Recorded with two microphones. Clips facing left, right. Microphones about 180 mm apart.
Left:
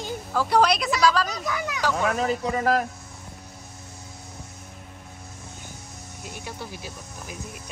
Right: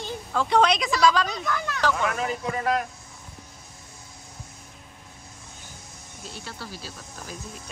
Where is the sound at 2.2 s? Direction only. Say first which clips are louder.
Left 4 dB; 35° left (ahead or behind).